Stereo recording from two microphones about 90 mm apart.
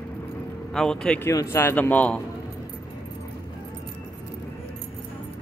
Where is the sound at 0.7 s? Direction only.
5° left (ahead or behind).